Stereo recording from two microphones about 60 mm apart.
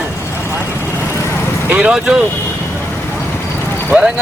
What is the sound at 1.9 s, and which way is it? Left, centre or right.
Speech, centre.